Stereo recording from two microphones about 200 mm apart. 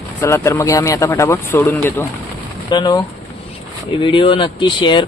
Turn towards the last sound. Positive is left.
turn(degrees=25)  # may be behind; listen again after turning